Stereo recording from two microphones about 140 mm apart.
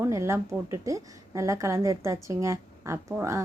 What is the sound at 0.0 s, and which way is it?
A woman's voice, 20° right (ahead or behind).